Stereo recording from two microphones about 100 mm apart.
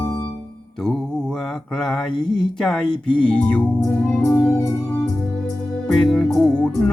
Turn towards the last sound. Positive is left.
turn(degrees=10)  # may be behind; listen again after turning